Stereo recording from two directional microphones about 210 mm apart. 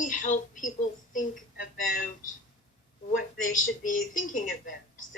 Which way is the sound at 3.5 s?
40° left (ahead or behind).